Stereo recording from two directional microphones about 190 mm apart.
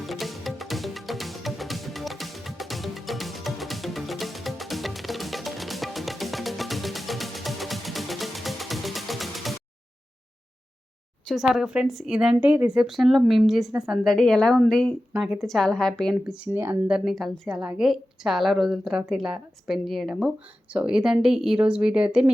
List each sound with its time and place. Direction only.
0.0 s music: centre (ahead or behind)
11.3 s a woman's voice: centre (ahead or behind)
16.3 s a woman's voice: 10° right (ahead or behind)